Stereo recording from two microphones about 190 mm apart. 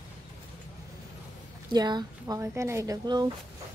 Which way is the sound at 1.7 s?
20° right (ahead or behind).